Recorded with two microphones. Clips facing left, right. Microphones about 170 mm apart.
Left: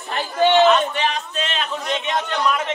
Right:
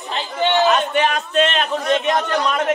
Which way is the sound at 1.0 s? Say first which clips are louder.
Right 6 dB; 55° right (ahead or behind).